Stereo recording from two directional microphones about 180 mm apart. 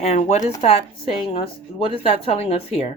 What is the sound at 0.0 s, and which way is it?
A woman's voice, 35° left (ahead or behind).